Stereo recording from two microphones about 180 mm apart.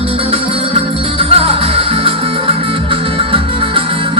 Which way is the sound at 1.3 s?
30° right (ahead or behind).